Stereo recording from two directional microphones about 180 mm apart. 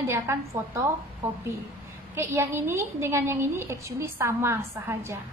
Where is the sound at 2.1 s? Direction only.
15° right (ahead or behind).